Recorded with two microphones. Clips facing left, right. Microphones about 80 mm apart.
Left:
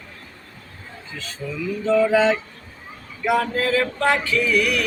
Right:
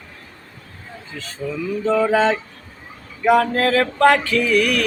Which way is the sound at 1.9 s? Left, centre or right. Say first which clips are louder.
Even; right.